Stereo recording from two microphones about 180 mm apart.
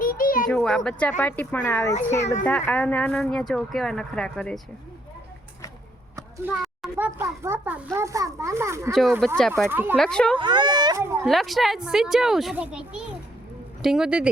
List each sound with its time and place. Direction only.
0.0 s a sound: 50° left (ahead or behind)
0.4 s a woman's voice: 5° left (ahead or behind)
6.1 s a sound: 15° right (ahead or behind)
6.5 s a sound: centre (ahead or behind)
6.9 s a child's voice: 10° right (ahead or behind)
8.9 s speech: centre (ahead or behind)
9.6 s a child's voice: 10° right (ahead or behind)
10.0 s speech: 5° left (ahead or behind)
10.3 s speech: 25° right (ahead or behind)
11.3 s speech: centre (ahead or behind)